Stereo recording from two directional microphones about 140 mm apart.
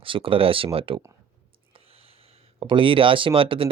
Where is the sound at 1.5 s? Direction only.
40° right (ahead or behind).